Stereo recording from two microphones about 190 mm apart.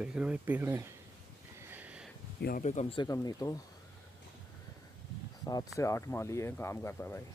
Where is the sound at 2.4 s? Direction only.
45° left (ahead or behind).